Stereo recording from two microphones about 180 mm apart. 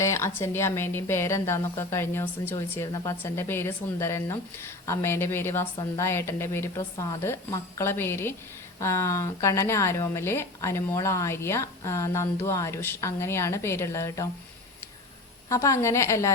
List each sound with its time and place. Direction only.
0.0 s speech: 15° left (ahead or behind)
15.4 s speech: 15° left (ahead or behind)